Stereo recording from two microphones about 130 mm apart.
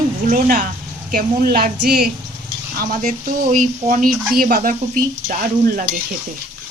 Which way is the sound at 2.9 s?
90° right.